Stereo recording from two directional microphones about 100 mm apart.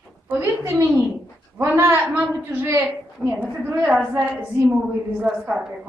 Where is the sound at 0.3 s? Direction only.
20° right (ahead or behind).